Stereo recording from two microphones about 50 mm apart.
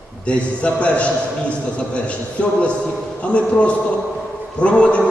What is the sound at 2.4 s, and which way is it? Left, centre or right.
A man's voice, left.